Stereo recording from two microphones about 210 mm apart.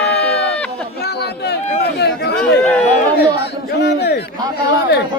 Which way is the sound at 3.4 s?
50° left (ahead or behind).